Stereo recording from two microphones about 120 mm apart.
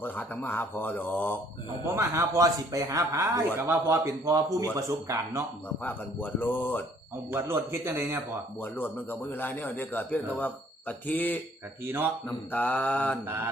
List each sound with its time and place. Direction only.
0.0 s a man's voice: 15° left (ahead or behind)
2.0 s a man's voice: 25° right (ahead or behind)
5.6 s a man's voice: 15° left (ahead or behind)
7.3 s a man's voice: 20° right (ahead or behind)
8.8 s a man's voice: 15° left (ahead or behind)
11.9 s speech: 15° right (ahead or behind)
12.5 s a man's voice: 15° left (ahead or behind)
13.2 s a man's voice: 20° right (ahead or behind)